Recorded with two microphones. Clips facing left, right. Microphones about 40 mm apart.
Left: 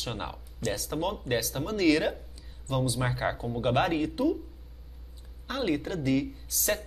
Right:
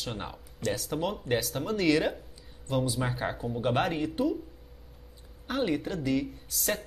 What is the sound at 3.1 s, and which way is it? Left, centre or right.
Speech, centre.